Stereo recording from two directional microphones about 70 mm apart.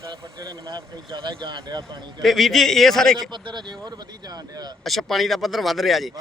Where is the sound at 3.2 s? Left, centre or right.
Right.